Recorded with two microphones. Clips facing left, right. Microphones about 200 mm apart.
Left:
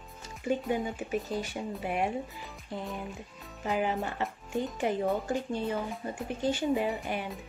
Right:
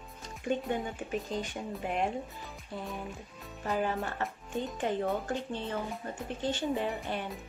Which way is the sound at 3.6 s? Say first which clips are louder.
Left 2 dB; 15° left (ahead or behind).